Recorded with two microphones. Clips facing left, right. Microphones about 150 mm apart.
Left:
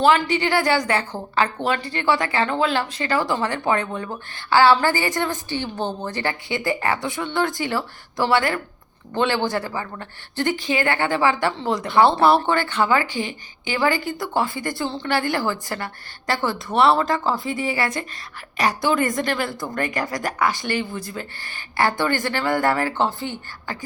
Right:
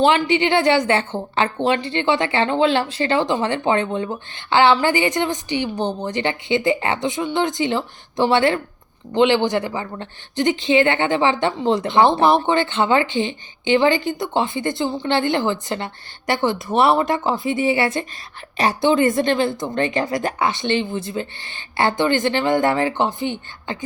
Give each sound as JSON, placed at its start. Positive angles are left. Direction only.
{"t": 0.0, "sound": "a woman's voice", "side_deg": -25}